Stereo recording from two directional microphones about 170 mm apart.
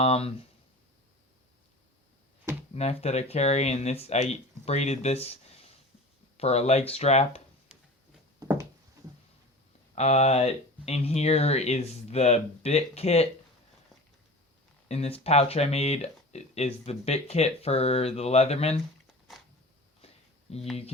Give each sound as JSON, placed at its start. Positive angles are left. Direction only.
{"t": 0.0, "sound": "speech", "side_deg": 35}
{"t": 2.7, "sound": "speech", "side_deg": 40}
{"t": 8.4, "sound": "a sound", "side_deg": -20}
{"t": 9.9, "sound": "speech", "side_deg": 40}
{"t": 14.8, "sound": "speech", "side_deg": 35}
{"t": 20.5, "sound": "speech", "side_deg": 35}